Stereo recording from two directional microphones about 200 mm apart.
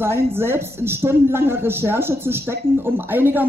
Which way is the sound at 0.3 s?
10° right (ahead or behind).